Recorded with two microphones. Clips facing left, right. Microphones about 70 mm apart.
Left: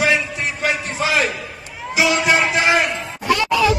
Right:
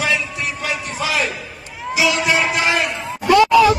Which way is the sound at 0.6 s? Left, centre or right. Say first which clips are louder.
Left 4 dB; left.